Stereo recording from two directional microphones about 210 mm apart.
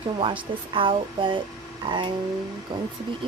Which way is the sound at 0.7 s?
25° right (ahead or behind).